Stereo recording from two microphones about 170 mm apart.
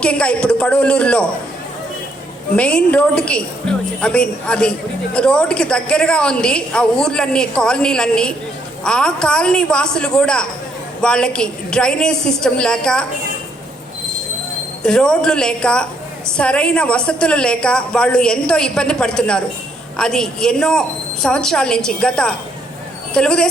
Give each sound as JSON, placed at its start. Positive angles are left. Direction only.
{"t": 0.0, "sound": "a woman's voice", "side_deg": 5}
{"t": 2.6, "sound": "a woman's voice", "side_deg": 5}
{"t": 14.8, "sound": "a woman's voice", "side_deg": 5}